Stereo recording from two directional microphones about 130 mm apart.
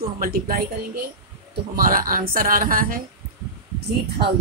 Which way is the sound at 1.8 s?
90° right.